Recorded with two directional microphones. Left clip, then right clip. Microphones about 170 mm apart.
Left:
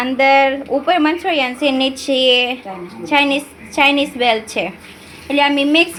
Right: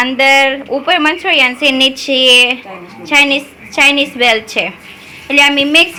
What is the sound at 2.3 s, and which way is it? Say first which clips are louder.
A woman's voice: right 9 dB; centre (ahead or behind).